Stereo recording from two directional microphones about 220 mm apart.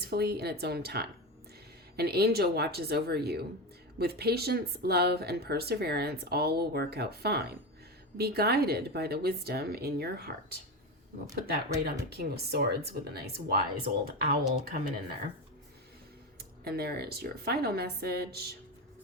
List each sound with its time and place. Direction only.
0.0 s speech: 45° right (ahead or behind)
11.3 s speech: 45° right (ahead or behind)
16.4 s speech: 45° right (ahead or behind)